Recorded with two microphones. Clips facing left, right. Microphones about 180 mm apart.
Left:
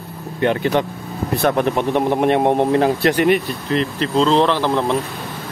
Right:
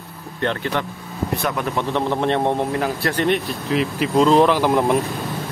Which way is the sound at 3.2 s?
5° left (ahead or behind).